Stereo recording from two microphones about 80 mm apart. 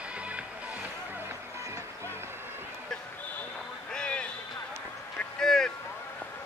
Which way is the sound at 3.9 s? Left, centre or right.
Centre.